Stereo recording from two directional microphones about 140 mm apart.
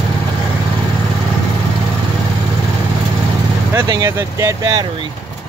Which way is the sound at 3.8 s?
25° right (ahead or behind).